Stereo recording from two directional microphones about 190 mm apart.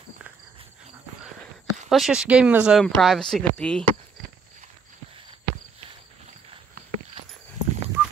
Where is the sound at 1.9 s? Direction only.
Centre (ahead or behind).